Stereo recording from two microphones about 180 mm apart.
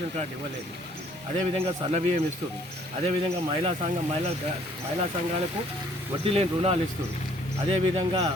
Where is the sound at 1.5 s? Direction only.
35° right (ahead or behind).